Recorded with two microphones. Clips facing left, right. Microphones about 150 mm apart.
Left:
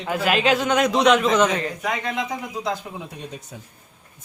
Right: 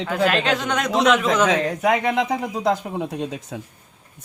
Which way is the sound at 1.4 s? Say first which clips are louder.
Right 5 dB; 90° right.